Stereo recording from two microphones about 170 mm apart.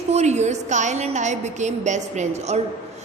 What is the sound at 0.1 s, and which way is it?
A woman's voice, 40° right (ahead or behind).